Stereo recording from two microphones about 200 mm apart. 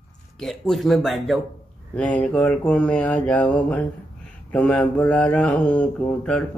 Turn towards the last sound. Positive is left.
turn(degrees=5)  # may be behind; listen again after turning